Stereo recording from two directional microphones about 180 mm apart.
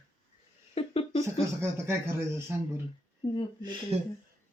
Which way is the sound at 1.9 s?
15° right (ahead or behind).